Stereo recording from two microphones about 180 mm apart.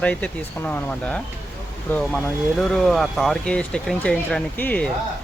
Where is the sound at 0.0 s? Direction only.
5° left (ahead or behind).